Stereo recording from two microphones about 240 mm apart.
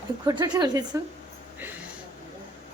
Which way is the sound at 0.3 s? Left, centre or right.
Centre.